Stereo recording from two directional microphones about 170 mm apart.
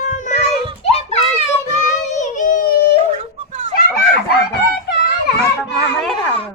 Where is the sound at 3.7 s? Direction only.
65° left (ahead or behind).